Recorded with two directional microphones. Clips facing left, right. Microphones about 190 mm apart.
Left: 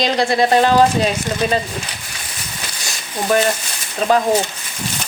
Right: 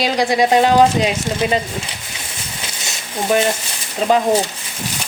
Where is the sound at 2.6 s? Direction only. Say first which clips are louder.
Right 1 dB; 20° right (ahead or behind).